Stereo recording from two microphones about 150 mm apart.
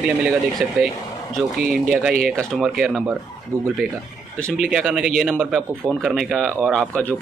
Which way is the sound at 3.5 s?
20° right (ahead or behind).